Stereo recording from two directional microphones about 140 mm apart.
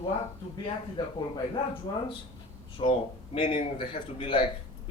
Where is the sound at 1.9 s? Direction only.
30° left (ahead or behind).